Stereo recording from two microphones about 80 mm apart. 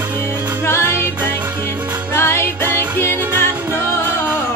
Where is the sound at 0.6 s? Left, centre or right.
Left.